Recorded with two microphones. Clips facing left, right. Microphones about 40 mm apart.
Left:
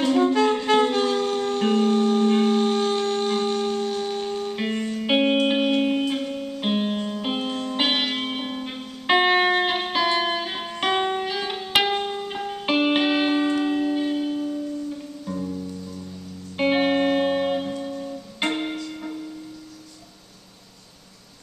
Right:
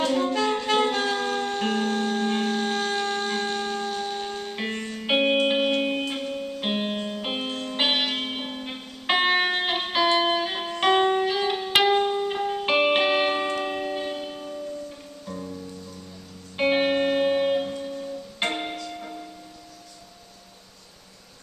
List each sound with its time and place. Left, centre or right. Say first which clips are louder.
0.0 s saxophone: left 4 dB; centre
0.8 s vehicle: left 3 dB; centre
1.3 s music: left 3 dB; right
1.6 s music: left 8 dB; centre
3.4 s shofar: left 4 dB; centre
4.0 s music: left 4 dB; centre
17.6 s music: left 2 dB; centre